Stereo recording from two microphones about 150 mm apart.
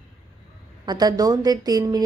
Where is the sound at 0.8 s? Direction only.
25° right (ahead or behind).